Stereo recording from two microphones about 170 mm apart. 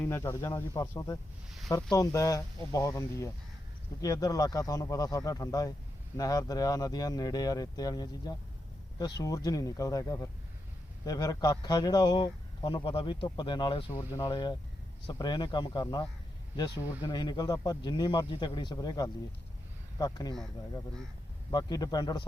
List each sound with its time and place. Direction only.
0.0 s a man's voice: 15° left (ahead or behind)
21.5 s a man's voice: 25° left (ahead or behind)